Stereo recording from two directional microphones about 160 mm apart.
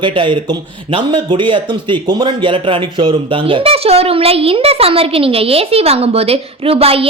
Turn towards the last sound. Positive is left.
turn(degrees=-35)  # may be behind; listen again after turning